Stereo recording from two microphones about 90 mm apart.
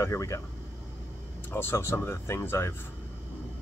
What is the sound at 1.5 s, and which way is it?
Speech, 30° left (ahead or behind).